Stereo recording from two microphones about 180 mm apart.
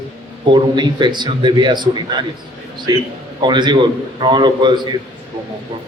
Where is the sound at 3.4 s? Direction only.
25° right (ahead or behind).